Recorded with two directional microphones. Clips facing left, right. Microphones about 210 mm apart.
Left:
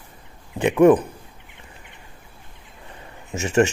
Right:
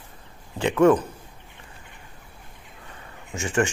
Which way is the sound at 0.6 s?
15° left (ahead or behind).